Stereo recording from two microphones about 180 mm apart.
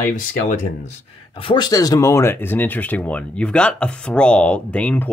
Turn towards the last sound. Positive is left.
turn(degrees=5)  # may be behind; listen again after turning